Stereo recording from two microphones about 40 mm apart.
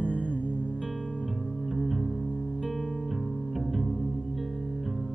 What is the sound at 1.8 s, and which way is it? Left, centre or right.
Music, centre.